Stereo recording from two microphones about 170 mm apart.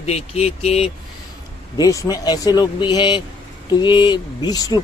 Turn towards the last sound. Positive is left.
turn(degrees=20)  # may be behind; listen again after turning